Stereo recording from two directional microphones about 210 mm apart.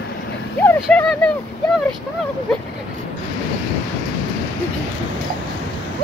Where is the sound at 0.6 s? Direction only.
10° left (ahead or behind).